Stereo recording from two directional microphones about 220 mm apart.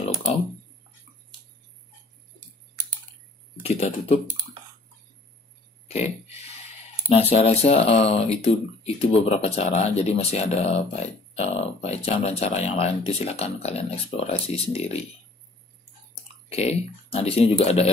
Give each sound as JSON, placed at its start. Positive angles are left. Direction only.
{"t": 3.6, "sound": "speech", "side_deg": 30}
{"t": 5.9, "sound": "speech", "side_deg": 30}
{"t": 16.4, "sound": "speech", "side_deg": 30}